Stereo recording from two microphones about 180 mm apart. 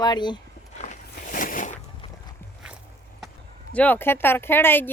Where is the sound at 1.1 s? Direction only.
50° left (ahead or behind).